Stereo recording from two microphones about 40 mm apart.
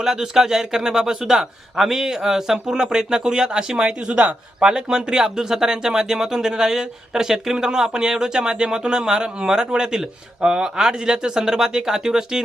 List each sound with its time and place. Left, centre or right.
0.0 s speech: centre